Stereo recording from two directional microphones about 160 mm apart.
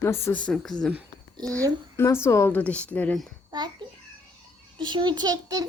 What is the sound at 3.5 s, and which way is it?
A child's voice, 25° right (ahead or behind).